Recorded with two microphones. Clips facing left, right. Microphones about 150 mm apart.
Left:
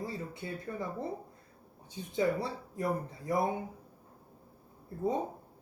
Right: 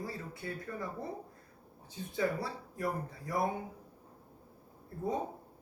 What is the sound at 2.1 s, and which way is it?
Speech, 20° left (ahead or behind).